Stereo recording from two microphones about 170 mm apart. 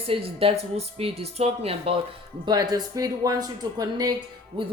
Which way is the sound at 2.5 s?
20° right (ahead or behind).